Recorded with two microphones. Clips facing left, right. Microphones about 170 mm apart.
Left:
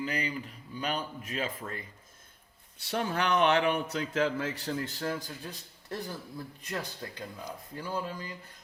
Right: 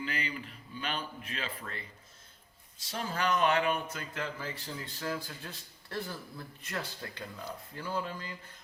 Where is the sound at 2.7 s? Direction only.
65° left (ahead or behind).